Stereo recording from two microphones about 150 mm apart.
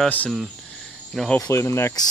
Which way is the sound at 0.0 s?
10° left (ahead or behind).